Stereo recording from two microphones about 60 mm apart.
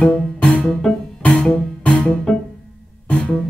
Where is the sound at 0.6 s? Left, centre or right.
Centre.